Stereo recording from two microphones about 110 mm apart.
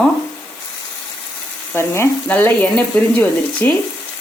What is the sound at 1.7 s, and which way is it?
Frying, 25° left (ahead or behind).